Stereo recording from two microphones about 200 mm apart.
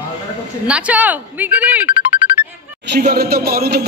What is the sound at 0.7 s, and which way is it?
Speech, 5° right (ahead or behind).